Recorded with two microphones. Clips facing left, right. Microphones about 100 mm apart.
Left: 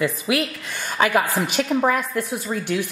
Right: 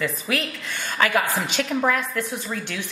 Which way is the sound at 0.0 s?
10° left (ahead or behind).